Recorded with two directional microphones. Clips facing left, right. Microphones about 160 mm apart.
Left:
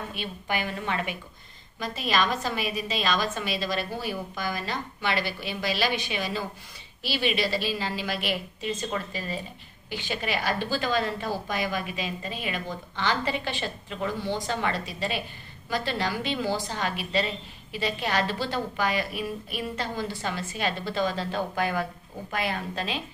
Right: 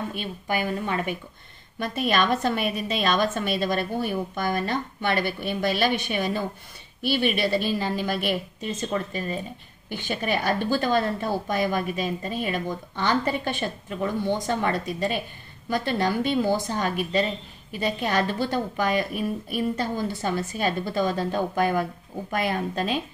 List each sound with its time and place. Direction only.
0.1 s a woman's voice: 45° right (ahead or behind)
1.8 s a woman's voice: 55° right (ahead or behind)